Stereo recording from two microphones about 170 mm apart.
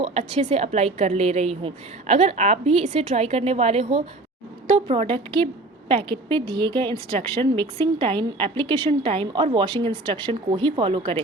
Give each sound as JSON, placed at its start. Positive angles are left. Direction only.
{"t": 0.0, "sound": "a woman's voice", "side_deg": -40}